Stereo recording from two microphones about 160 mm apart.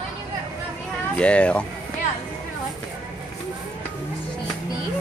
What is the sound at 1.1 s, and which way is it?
Speech, 5° left (ahead or behind).